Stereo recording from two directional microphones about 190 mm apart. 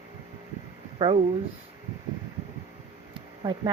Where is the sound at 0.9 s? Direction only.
25° right (ahead or behind).